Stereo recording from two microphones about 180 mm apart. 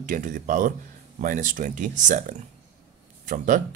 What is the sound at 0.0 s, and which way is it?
Speech, 50° right (ahead or behind).